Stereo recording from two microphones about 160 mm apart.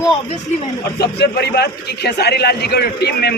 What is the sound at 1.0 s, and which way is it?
A man's voice, 90° left.